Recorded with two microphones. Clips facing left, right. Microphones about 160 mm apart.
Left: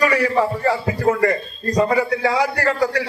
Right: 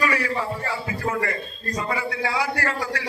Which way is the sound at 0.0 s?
40° left (ahead or behind).